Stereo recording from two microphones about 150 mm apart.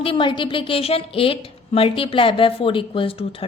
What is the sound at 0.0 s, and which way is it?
A woman's voice, 35° left (ahead or behind).